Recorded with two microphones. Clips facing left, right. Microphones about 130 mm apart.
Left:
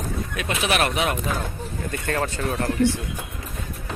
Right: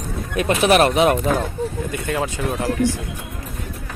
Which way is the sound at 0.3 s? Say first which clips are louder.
Right 9 dB; 40° right (ahead or behind).